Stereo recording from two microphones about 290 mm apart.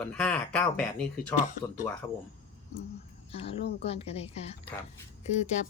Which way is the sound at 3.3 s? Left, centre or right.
Centre.